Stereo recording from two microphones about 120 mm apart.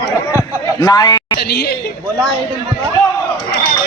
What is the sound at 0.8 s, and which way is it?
Speech, 35° left (ahead or behind).